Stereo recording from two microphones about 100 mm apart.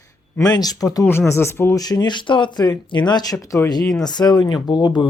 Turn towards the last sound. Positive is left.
turn(degrees=45)  # may be behind; listen again after turning